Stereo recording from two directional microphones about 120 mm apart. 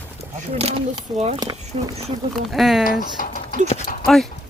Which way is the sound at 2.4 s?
Centre (ahead or behind).